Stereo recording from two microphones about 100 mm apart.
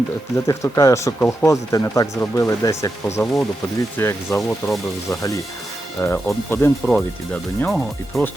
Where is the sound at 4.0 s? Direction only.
25° left (ahead or behind).